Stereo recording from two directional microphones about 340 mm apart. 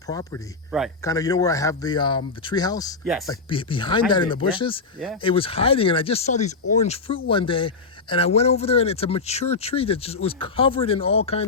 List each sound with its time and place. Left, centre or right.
0.1 s speech: centre